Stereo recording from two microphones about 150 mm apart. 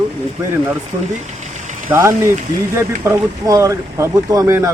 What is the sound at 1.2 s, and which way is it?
Engine, 50° right (ahead or behind).